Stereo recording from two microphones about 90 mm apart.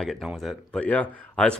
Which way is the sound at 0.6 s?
15° left (ahead or behind).